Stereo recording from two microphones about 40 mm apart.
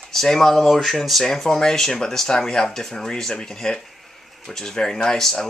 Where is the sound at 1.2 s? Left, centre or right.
Centre.